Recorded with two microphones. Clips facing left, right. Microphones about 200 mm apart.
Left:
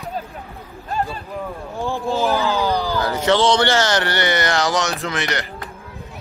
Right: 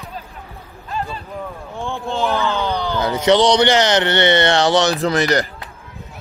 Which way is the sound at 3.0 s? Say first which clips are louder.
Right 4 dB; 20° right (ahead or behind).